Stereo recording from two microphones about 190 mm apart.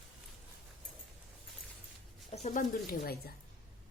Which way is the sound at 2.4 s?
45° left (ahead or behind).